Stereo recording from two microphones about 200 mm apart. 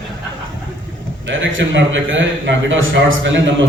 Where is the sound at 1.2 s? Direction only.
70° right (ahead or behind).